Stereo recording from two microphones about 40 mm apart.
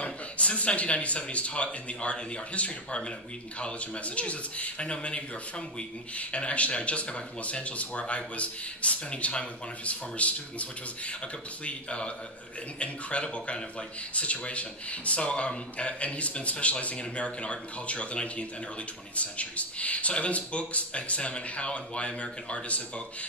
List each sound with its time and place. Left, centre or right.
0.0 s speech: left